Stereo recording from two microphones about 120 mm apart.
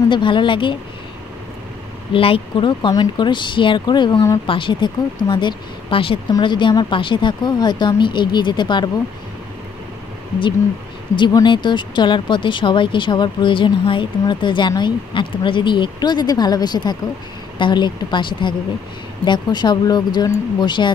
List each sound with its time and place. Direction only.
0.1 s speech: 40° left (ahead or behind)
2.1 s speech: 50° left (ahead or behind)
2.9 s speech: 35° left (ahead or behind)
11.1 s speech: 40° left (ahead or behind)